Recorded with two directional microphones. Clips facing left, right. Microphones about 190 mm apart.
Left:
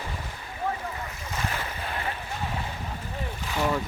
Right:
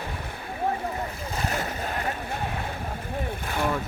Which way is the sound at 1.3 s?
45° right (ahead or behind).